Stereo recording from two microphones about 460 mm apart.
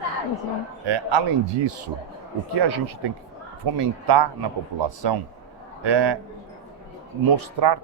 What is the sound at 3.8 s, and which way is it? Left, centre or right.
A man's voice, right.